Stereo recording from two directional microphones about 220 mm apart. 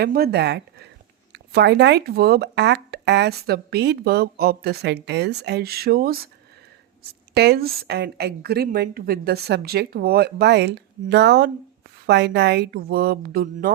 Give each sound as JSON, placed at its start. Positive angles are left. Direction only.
{"t": 0.0, "sound": "speech", "side_deg": -45}